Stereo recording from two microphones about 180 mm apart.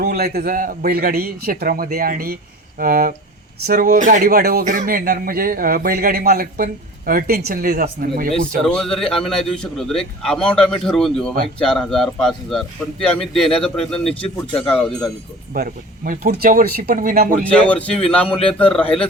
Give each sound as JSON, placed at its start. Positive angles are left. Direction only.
{"t": 0.0, "sound": "a man's voice", "side_deg": -55}
{"t": 8.3, "sound": "a man's voice", "side_deg": 5}
{"t": 15.5, "sound": "speech", "side_deg": -55}
{"t": 17.4, "sound": "speech", "side_deg": 10}